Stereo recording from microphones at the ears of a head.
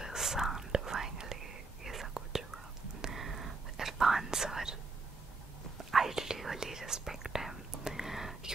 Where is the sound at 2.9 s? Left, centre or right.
Right.